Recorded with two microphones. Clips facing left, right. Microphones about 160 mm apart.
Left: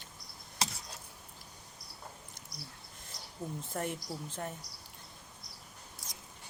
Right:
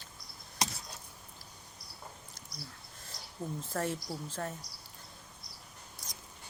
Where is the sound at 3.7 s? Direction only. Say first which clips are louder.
Right 3 dB; 20° left (ahead or behind).